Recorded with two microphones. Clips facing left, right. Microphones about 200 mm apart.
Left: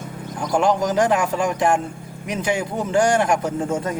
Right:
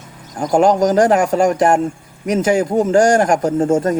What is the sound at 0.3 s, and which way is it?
A man's voice, 45° right (ahead or behind).